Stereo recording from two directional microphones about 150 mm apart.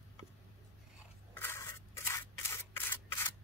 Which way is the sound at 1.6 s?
20° left (ahead or behind).